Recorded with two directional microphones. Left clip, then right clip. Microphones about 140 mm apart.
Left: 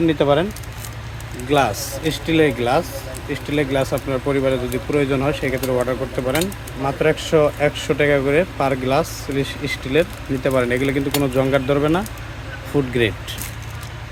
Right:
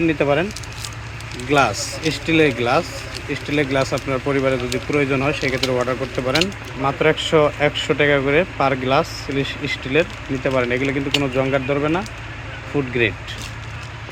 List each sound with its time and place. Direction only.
0.1 s speech: 20° left (ahead or behind)
1.5 s speech: 15° left (ahead or behind)
5.7 s speech: 5° left (ahead or behind); by 12.0 s 40° left (ahead or behind)
12.7 s speech: 30° left (ahead or behind)